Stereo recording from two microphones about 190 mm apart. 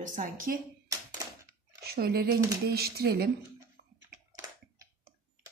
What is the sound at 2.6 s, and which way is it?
Speech, 55° right (ahead or behind).